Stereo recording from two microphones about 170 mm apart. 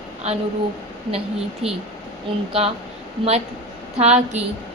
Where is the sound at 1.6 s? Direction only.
35° right (ahead or behind).